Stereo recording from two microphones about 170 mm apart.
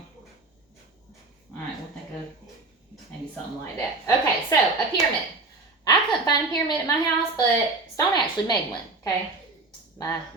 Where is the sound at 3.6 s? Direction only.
20° left (ahead or behind).